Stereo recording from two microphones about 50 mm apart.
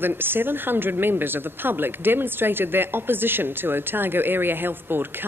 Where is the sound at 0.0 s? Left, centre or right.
Right.